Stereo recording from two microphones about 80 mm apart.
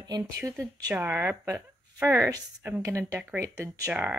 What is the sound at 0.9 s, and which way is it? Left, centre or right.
Speech, right.